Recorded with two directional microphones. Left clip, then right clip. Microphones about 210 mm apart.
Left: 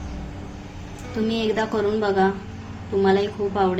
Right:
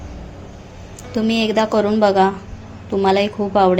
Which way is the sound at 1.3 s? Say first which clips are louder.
Right 7 dB; 35° right (ahead or behind).